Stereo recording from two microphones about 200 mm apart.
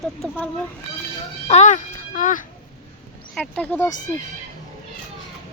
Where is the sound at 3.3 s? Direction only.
5° left (ahead or behind).